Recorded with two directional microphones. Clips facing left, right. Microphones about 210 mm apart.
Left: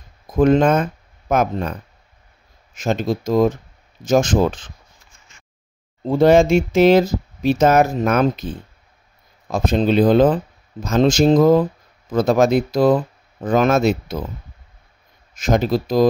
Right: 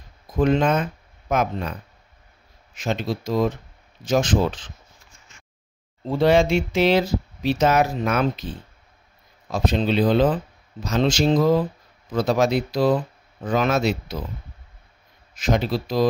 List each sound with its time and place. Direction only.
0.3 s speech: 50° left (ahead or behind)
6.0 s speech: 45° left (ahead or behind)
15.3 s speech: 45° left (ahead or behind)